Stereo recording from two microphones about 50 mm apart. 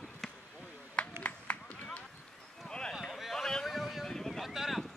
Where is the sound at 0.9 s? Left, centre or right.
Left.